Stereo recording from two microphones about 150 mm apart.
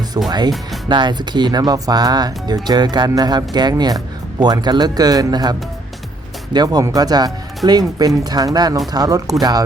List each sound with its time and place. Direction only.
0.3 s speech: 25° right (ahead or behind)